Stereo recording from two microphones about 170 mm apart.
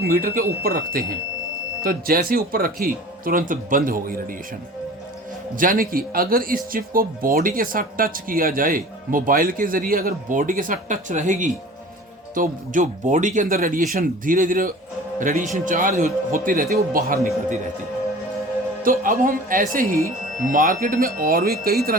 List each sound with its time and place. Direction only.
0.0 s speech: 60° right (ahead or behind)
5.5 s speech: 55° right (ahead or behind)
18.8 s speech: 55° right (ahead or behind)